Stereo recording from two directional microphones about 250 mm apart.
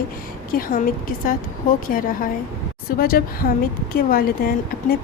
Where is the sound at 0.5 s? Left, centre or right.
Left.